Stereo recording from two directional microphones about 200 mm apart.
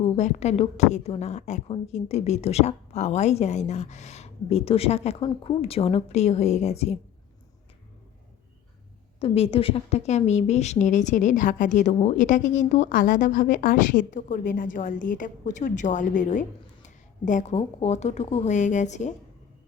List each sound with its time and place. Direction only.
0.0 s a woman's voice: 35° left (ahead or behind)
9.2 s a woman's voice: 30° left (ahead or behind)